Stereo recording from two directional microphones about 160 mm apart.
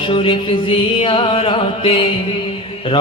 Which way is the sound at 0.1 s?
35° left (ahead or behind).